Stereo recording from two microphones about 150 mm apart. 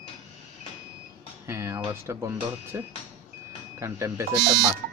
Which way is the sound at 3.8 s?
20° right (ahead or behind).